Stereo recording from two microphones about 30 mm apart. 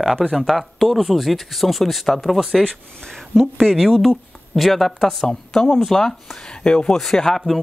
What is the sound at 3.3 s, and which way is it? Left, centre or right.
Speech, centre.